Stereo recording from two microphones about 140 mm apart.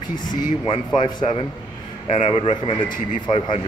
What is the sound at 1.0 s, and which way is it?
A man's voice, 35° left (ahead or behind).